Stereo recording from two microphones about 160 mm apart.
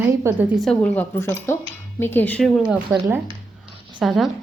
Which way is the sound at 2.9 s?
25° right (ahead or behind).